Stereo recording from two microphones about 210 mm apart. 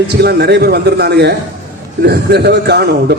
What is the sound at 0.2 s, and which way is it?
A man's voice, 50° right (ahead or behind).